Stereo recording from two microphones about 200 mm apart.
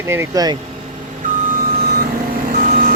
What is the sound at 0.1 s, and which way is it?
Speech, 15° right (ahead or behind).